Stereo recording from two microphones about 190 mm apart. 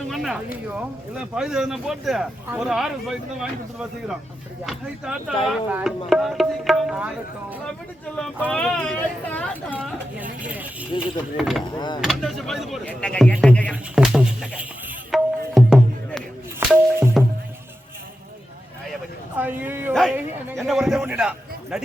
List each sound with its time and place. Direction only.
0.1 s speech: centre (ahead or behind)
8.1 s speech: 5° left (ahead or behind)
9.7 s a woman's voice: 10° right (ahead or behind)
11.6 s speech: 25° left (ahead or behind)
11.9 s speech: centre (ahead or behind)
13.9 s a sound: 5° right (ahead or behind)
15.1 s music: centre (ahead or behind)
16.6 s music: 10° right (ahead or behind)
19.4 s a woman's voice: 10° right (ahead or behind)
19.9 s speech: centre (ahead or behind)